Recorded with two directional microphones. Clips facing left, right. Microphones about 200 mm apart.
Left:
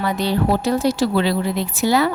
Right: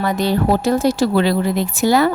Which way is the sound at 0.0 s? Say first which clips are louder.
Right 2 dB; 45° right (ahead or behind).